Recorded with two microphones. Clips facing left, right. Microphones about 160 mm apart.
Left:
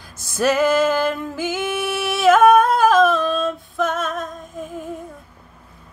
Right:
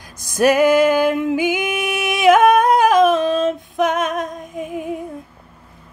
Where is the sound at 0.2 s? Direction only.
15° right (ahead or behind).